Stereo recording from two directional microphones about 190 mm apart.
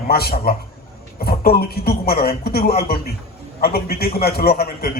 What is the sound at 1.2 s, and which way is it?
A man's voice, 55° left (ahead or behind).